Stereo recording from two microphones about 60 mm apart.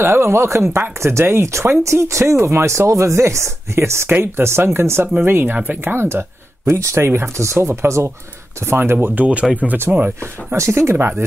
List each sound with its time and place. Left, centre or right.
0.0 s speech: right
5.9 s speech: right
6.7 s speech: right
7.1 s speech: right
10.2 s speech: right